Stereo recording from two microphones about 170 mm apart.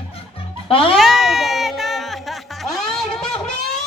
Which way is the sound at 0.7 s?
35° left (ahead or behind).